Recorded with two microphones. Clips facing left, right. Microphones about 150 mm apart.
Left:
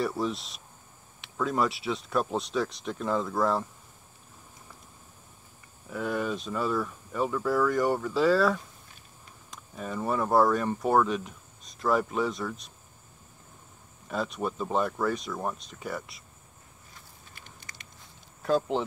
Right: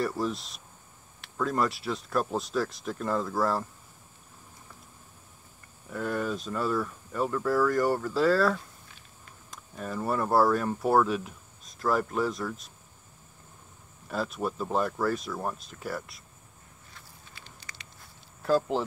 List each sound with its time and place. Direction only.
0.0 s speech: centre (ahead or behind)
5.9 s speech: centre (ahead or behind)
14.0 s speech: centre (ahead or behind)
17.4 s a sound: 50° left (ahead or behind)
18.4 s speech: centre (ahead or behind)